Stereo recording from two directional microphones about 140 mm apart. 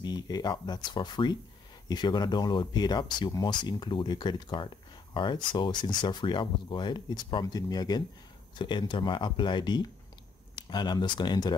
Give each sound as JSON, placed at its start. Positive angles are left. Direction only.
{"t": 0.0, "sound": "speech", "side_deg": 30}